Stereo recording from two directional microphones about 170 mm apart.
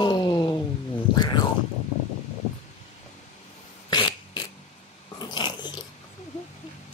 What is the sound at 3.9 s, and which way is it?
Fart, 25° left (ahead or behind).